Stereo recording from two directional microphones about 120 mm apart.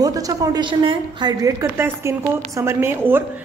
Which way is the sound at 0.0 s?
30° right (ahead or behind).